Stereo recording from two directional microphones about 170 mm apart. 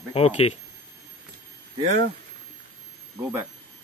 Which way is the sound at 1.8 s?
45° right (ahead or behind).